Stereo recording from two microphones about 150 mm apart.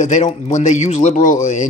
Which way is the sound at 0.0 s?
55° left (ahead or behind).